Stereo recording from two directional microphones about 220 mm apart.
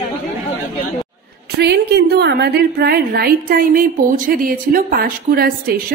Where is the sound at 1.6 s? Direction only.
50° right (ahead or behind).